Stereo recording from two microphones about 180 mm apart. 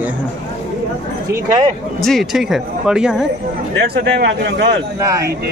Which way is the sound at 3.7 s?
60° right (ahead or behind).